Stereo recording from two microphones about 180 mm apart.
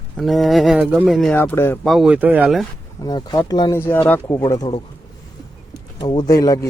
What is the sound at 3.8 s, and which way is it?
Speech, 10° left (ahead or behind).